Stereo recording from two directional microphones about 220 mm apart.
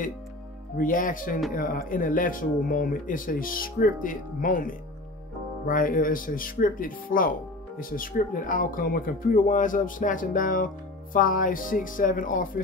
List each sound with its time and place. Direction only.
0.7 s speech: 40° left (ahead or behind)
5.7 s speech: 40° left (ahead or behind)